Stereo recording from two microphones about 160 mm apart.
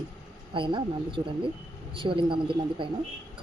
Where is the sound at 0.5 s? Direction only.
30° right (ahead or behind).